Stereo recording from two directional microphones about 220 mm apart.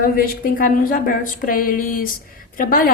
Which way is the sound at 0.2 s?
40° left (ahead or behind).